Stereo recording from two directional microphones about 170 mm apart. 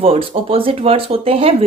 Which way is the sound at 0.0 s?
35° right (ahead or behind).